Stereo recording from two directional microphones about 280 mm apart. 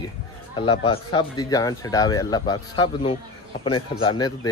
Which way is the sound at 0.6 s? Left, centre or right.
Centre.